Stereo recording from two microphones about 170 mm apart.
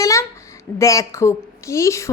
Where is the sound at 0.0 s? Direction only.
20° left (ahead or behind).